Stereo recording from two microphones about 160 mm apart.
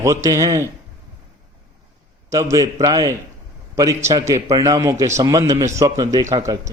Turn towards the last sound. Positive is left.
turn(degrees=-20)  # may be behind; listen again after turning